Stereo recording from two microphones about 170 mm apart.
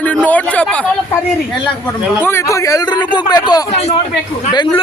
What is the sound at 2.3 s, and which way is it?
A man's voice, 20° left (ahead or behind).